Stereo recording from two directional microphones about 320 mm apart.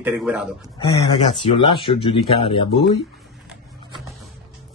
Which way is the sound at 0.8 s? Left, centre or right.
Centre.